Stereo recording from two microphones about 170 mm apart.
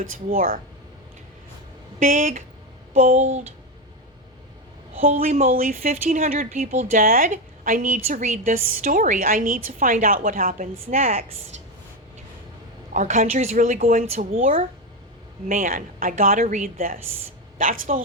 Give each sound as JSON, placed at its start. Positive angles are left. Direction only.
{"t": 0.0, "sound": "a woman's voice", "side_deg": -55}
{"t": 2.0, "sound": "speech", "side_deg": -45}
{"t": 5.2, "sound": "speech", "side_deg": -35}
{"t": 5.5, "sound": "a woman's voice", "side_deg": -60}
{"t": 12.9, "sound": "a woman's voice", "side_deg": -45}